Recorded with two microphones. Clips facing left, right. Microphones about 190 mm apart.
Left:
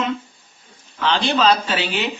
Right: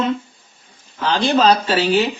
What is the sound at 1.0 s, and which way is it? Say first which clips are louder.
Speech: right 3 dB; 40° right (ahead or behind).